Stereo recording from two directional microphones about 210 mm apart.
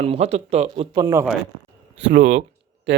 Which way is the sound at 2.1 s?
30° right (ahead or behind).